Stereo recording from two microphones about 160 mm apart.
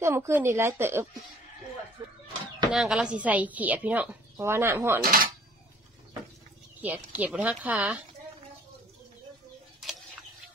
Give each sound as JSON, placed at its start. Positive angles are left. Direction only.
{"t": 0.0, "sound": "a woman's voice", "side_deg": -15}
{"t": 2.0, "sound": "a sound", "side_deg": -25}
{"t": 2.7, "sound": "a woman's voice", "side_deg": -5}
{"t": 5.0, "sound": "speech", "side_deg": -65}
{"t": 6.8, "sound": "a woman's voice", "side_deg": -10}